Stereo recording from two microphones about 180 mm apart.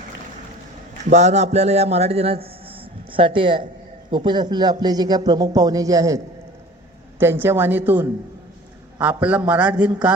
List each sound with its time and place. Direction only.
1.1 s speech: 40° right (ahead or behind)
2.6 s a sound: 30° right (ahead or behind)
4.1 s a man's voice: 25° right (ahead or behind); by 10.1 s 10° right (ahead or behind)